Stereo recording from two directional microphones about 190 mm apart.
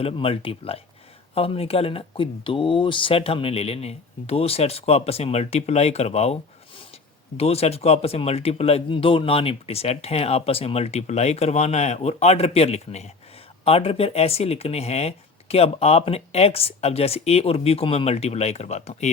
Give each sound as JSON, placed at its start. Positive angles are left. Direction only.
{"t": 0.0, "sound": "speech", "side_deg": 30}